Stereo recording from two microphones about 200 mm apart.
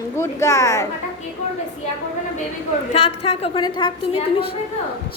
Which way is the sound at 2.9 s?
30° left (ahead or behind).